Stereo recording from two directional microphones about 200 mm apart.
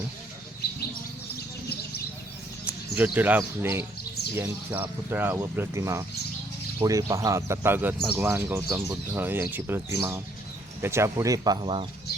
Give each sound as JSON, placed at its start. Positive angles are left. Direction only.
{"t": 2.9, "sound": "speech", "side_deg": -10}